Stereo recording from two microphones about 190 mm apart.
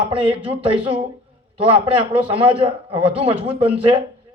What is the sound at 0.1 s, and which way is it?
A man's voice, 30° right (ahead or behind).